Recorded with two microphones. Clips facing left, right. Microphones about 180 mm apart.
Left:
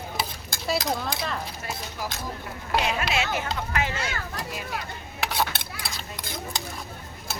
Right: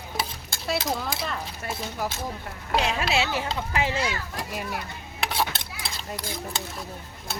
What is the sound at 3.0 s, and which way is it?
Speech, 30° right (ahead or behind).